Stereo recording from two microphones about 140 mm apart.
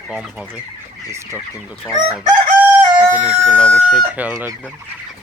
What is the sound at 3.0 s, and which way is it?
Speech, 10° right (ahead or behind).